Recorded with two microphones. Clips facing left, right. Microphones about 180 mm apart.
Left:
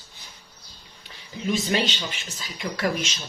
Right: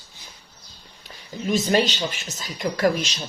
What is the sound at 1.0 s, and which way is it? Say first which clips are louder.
Speech: right 2 dB; 45° right (ahead or behind).